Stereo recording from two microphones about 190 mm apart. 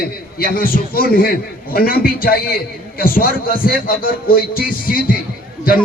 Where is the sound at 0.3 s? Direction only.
50° left (ahead or behind).